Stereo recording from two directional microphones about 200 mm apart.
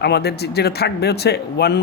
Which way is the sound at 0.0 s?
55° left (ahead or behind).